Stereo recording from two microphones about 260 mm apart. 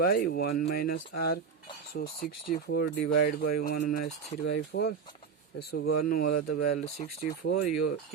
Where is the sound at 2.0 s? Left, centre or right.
Left.